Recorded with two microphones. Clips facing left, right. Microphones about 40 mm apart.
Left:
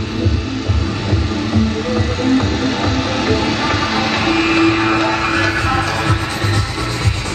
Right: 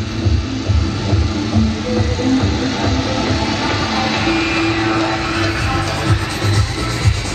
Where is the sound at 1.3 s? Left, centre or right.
Left.